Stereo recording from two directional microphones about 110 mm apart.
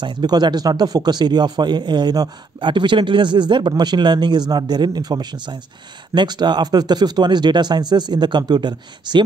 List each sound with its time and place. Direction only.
0.0 s speech: 45° right (ahead or behind)